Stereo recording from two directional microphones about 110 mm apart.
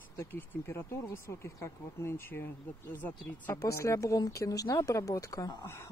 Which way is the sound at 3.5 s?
30° left (ahead or behind).